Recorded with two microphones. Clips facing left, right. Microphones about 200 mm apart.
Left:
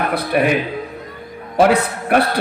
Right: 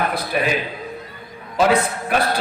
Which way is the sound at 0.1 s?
60° left (ahead or behind).